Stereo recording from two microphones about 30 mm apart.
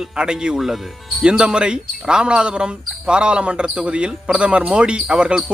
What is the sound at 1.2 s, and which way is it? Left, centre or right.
Speech, right.